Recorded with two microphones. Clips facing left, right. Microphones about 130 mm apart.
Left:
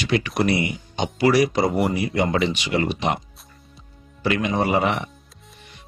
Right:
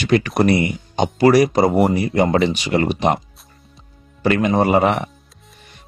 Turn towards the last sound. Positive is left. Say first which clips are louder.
# right 5 dB
turn(degrees=-50)  # may be behind; listen again after turning